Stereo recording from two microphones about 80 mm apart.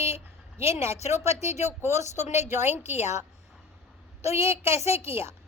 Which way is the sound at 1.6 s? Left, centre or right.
Right.